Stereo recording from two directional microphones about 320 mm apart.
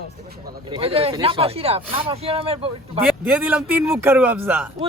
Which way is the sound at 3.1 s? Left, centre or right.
Centre.